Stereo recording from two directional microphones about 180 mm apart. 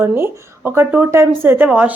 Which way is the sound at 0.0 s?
10° right (ahead or behind).